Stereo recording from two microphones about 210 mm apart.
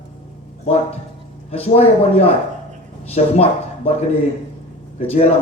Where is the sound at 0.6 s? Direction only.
30° left (ahead or behind).